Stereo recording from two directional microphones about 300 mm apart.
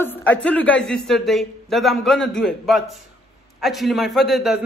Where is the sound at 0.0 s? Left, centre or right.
Centre.